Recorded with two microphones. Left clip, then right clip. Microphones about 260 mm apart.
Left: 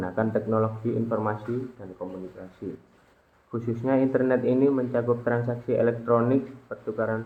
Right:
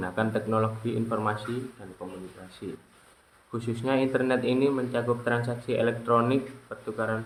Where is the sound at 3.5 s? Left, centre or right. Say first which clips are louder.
Left 2 dB; right.